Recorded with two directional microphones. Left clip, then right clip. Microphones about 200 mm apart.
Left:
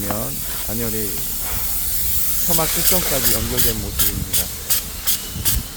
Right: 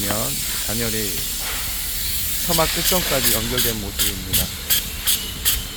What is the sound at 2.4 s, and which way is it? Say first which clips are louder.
Speech: right 3 dB; 15° right (ahead or behind).